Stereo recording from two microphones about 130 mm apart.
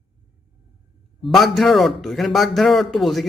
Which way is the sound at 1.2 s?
Centre (ahead or behind).